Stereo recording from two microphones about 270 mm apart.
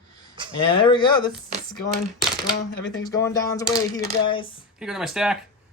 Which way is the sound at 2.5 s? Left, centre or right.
Left.